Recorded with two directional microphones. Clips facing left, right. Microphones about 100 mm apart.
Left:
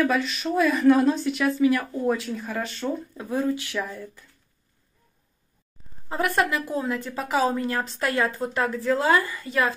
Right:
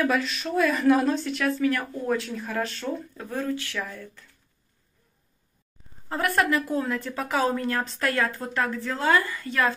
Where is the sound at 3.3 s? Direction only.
15° left (ahead or behind).